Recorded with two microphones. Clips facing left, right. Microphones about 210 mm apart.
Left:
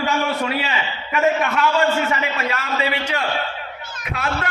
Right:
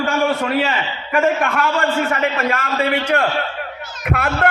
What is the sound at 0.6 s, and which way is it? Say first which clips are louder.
A man's voice: right 5 dB; 50° right (ahead or behind).